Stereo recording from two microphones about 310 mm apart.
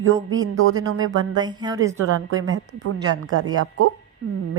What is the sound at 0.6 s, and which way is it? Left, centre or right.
Speech, right.